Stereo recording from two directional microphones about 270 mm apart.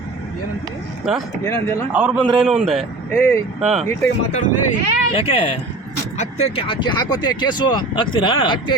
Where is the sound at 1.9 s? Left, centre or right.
Centre.